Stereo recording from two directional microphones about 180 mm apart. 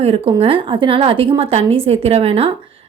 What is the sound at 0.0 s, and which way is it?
A woman's voice, 35° right (ahead or behind).